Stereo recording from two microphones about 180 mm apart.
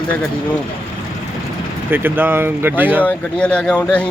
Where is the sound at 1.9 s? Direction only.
10° right (ahead or behind).